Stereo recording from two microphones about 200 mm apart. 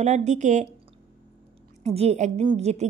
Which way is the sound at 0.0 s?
35° right (ahead or behind).